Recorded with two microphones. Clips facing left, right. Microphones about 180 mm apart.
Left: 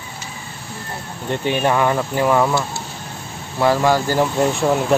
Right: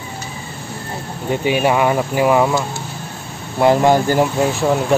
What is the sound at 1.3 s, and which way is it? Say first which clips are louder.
Speech: right 2 dB; 10° right (ahead or behind).